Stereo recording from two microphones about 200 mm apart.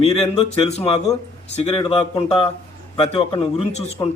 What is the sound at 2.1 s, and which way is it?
Speech, 30° left (ahead or behind).